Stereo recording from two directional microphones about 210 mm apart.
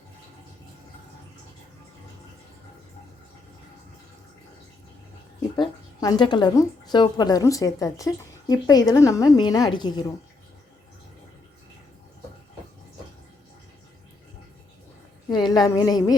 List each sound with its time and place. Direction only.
5.5 s speech: 20° left (ahead or behind)
15.3 s a woman's voice: 20° left (ahead or behind)